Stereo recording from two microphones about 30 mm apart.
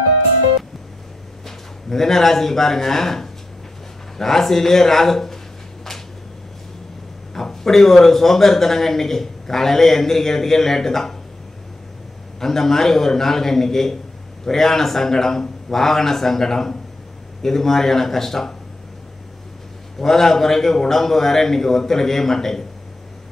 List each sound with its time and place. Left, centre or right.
1.4 s a man's voice: centre
7.3 s a man's voice: centre
12.4 s a man's voice: centre
20.0 s a man's voice: centre